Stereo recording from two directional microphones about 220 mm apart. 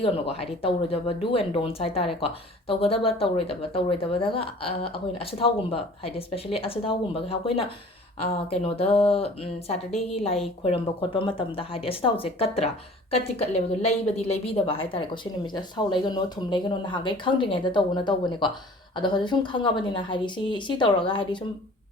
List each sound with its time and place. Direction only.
0.0 s speech: 25° left (ahead or behind)